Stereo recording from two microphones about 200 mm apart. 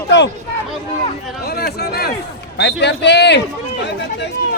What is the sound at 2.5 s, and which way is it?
Speech, 60° left (ahead or behind).